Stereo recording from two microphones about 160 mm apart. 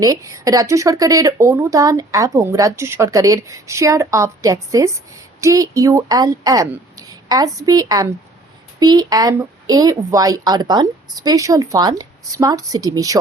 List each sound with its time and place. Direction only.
0.0 s a woman's voice: 20° right (ahead or behind)